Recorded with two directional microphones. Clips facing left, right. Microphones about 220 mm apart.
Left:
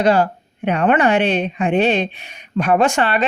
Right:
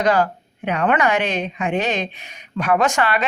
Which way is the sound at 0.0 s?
25° left (ahead or behind).